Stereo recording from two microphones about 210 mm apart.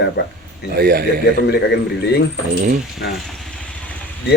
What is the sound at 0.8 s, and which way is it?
Speech, 50° right (ahead or behind).